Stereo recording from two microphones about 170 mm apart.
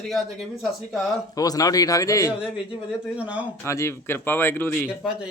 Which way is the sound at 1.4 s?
20° left (ahead or behind).